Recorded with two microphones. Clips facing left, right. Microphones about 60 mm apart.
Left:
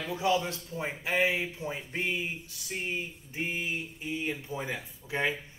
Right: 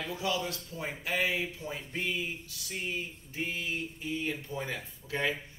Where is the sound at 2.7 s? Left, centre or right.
Left.